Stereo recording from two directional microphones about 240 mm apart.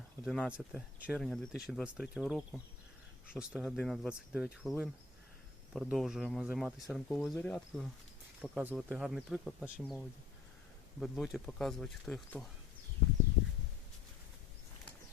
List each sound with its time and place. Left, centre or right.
0.3 s speech: centre
11.0 s speech: centre